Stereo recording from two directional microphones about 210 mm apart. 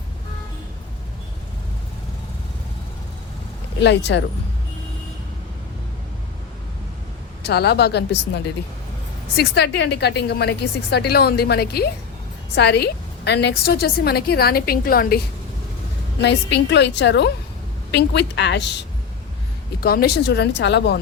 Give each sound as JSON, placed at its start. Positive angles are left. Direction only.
{"t": 3.8, "sound": "a woman's voice", "side_deg": 55}
{"t": 7.4, "sound": "a woman's voice", "side_deg": 50}
{"t": 16.2, "sound": "a woman's voice", "side_deg": 55}